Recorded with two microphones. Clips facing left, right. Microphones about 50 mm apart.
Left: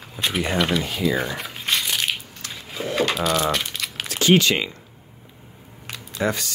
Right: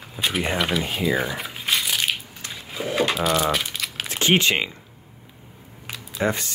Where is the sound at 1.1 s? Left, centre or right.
Centre.